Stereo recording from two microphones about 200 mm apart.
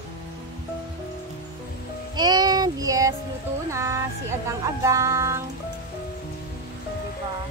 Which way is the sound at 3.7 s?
15° right (ahead or behind).